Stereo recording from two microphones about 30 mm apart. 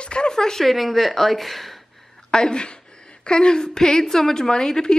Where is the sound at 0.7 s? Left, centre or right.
Centre.